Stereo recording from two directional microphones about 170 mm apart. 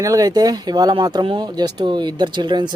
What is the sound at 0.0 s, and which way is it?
Speech, 20° right (ahead or behind).